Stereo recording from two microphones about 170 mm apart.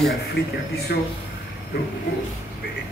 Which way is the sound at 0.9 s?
65° left (ahead or behind).